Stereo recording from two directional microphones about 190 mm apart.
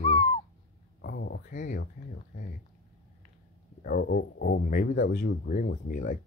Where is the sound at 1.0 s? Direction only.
60° left (ahead or behind).